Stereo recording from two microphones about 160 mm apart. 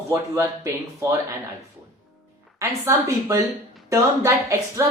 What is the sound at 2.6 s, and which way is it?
A woman's voice, 15° right (ahead or behind).